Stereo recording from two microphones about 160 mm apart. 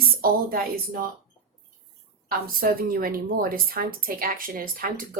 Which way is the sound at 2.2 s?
65° right (ahead or behind).